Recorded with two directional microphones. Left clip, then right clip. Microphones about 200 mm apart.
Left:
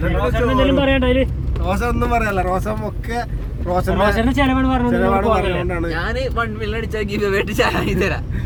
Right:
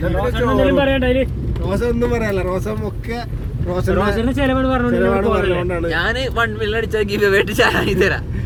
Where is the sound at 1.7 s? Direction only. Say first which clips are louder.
Even; 50° left (ahead or behind).